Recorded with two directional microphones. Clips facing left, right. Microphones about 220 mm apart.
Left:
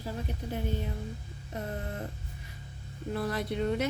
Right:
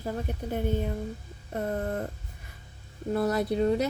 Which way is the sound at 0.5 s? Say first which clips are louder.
Right 6 dB; 50° right (ahead or behind).